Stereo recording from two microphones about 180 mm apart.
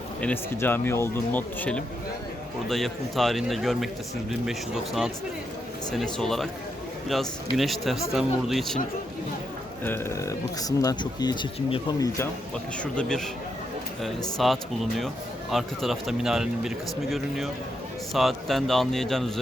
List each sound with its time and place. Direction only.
0.2 s speech: 10° left (ahead or behind)
7.5 s speech: centre (ahead or behind)
9.8 s speech: 15° left (ahead or behind)
12.8 s speech: 5° left (ahead or behind)
14.3 s speech: centre (ahead or behind)